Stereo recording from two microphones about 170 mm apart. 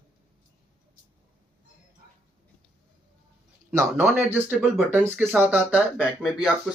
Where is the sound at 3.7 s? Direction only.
15° right (ahead or behind).